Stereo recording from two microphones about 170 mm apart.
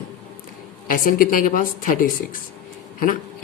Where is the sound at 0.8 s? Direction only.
55° left (ahead or behind).